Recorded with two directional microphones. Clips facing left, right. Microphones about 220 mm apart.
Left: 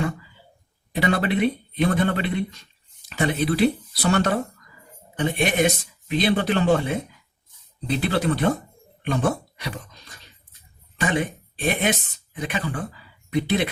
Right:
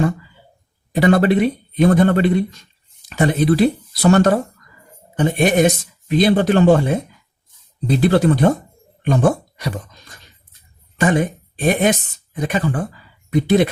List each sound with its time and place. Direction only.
0.9 s speech: 45° right (ahead or behind)
11.0 s speech: 45° right (ahead or behind)